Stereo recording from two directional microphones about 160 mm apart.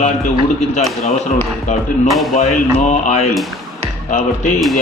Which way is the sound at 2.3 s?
50° left (ahead or behind).